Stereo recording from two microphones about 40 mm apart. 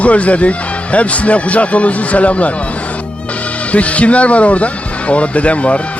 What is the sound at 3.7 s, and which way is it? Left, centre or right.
A man's voice, left.